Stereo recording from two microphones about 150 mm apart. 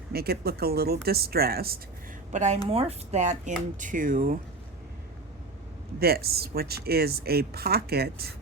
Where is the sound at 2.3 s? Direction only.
50° right (ahead or behind); by 4.4 s 70° right (ahead or behind).